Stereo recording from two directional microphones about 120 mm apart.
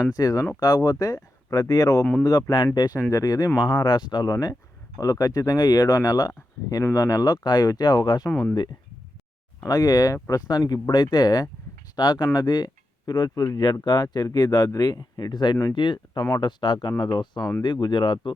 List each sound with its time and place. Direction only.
0.1 s speech: 30° left (ahead or behind)
8.3 s speech: 15° left (ahead or behind)
9.6 s speech: 30° left (ahead or behind)